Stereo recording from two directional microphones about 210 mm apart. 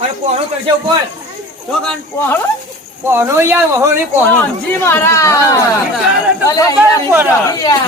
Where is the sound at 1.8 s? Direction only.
10° left (ahead or behind).